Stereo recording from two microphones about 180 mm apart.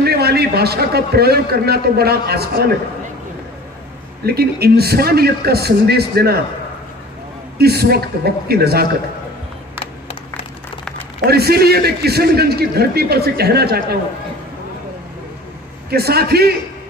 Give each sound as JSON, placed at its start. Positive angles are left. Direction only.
{"t": 0.0, "sound": "a man's voice", "side_deg": -60}
{"t": 4.3, "sound": "a man's voice", "side_deg": -60}
{"t": 7.5, "sound": "a man's voice", "side_deg": -60}
{"t": 11.2, "sound": "a man's voice", "side_deg": -60}
{"t": 15.9, "sound": "a man's voice", "side_deg": -60}